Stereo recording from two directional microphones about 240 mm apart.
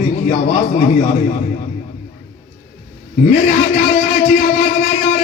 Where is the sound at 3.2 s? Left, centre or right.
Left.